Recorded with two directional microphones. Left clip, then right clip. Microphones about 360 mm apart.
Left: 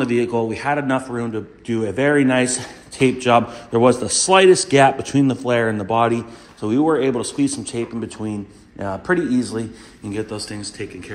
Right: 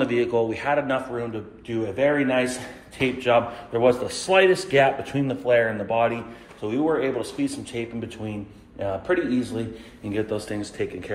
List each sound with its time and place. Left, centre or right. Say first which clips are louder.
0.0 s a man's voice: left 2 dB; centre